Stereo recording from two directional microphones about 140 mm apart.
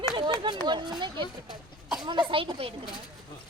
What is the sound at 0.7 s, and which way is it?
Speech, 30° right (ahead or behind).